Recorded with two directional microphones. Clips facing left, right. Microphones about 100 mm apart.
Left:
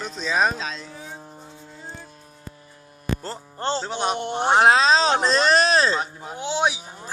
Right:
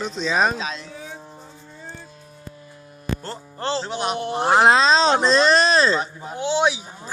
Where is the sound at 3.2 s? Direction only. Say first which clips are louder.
Even; 30° left (ahead or behind).